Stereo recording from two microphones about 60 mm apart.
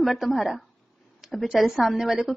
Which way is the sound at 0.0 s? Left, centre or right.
Centre.